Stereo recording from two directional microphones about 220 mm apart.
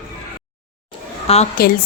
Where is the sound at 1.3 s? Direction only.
25° left (ahead or behind).